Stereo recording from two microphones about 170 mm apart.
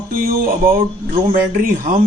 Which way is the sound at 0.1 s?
55° right (ahead or behind).